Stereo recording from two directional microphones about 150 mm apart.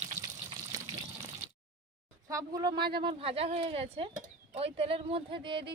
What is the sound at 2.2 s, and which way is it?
Speech, 25° right (ahead or behind).